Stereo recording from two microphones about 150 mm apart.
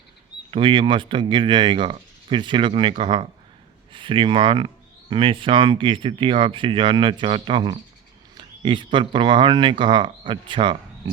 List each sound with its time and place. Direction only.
0.5 s speech: 35° right (ahead or behind)